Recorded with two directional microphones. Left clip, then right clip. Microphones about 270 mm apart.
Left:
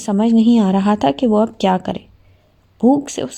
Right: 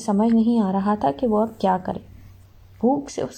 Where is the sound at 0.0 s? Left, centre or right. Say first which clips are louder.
Left 5 dB; left.